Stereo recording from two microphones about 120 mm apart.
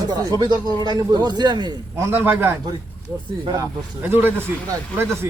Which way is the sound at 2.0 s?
20° right (ahead or behind).